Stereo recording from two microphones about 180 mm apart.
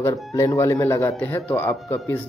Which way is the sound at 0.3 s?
15° left (ahead or behind).